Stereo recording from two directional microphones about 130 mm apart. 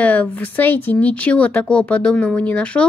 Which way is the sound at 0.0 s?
10° left (ahead or behind).